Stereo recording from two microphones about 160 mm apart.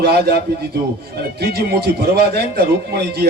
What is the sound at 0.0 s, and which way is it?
A man's voice, 85° right.